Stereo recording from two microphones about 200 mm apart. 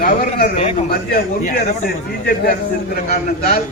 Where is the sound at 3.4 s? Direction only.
35° left (ahead or behind).